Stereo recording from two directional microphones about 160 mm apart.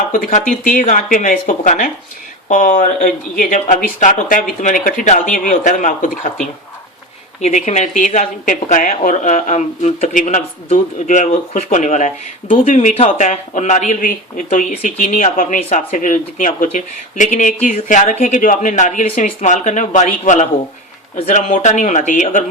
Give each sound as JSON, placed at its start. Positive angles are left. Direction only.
{"t": 0.1, "sound": "speech", "side_deg": 55}
{"t": 7.4, "sound": "speech", "side_deg": 45}